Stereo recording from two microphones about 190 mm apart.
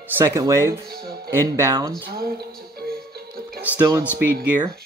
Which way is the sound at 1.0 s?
55° right (ahead or behind).